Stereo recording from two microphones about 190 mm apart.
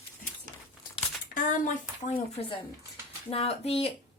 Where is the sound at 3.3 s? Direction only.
30° left (ahead or behind).